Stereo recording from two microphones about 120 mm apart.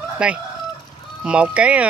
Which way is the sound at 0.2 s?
10° right (ahead or behind).